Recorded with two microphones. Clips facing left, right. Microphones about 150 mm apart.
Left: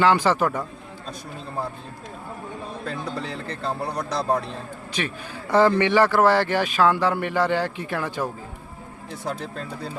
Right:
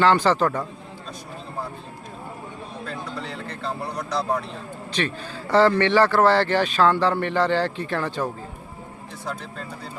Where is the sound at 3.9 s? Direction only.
35° left (ahead or behind).